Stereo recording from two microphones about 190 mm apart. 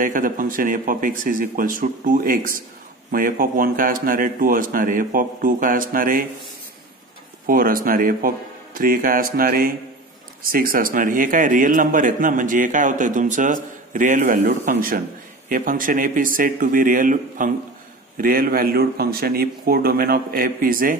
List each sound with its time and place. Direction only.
0.0 s a man's voice: 45° right (ahead or behind)
7.4 s a man's voice: 50° right (ahead or behind)